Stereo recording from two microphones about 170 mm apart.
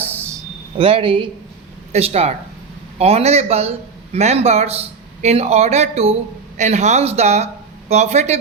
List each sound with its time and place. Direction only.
0.8 s a man's voice: 35° right (ahead or behind)